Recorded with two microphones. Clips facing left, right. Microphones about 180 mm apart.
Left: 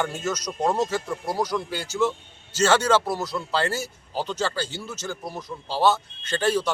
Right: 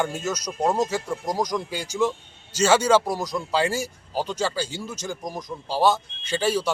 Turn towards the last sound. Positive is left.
turn(degrees=-10)  # may be behind; listen again after turning